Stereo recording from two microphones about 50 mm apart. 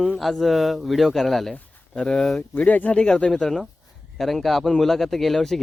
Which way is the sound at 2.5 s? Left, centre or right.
Left.